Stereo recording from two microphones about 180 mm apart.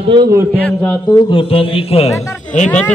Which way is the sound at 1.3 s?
30° left (ahead or behind).